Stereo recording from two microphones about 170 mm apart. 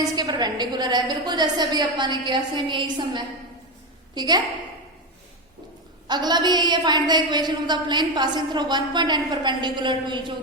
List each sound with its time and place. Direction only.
0.2 s a woman's voice: 25° right (ahead or behind)
6.1 s a woman's voice: 25° right (ahead or behind)